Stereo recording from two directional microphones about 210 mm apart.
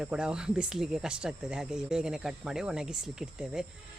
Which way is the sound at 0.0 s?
5° right (ahead or behind).